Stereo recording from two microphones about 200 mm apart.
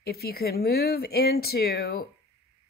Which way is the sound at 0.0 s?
50° left (ahead or behind).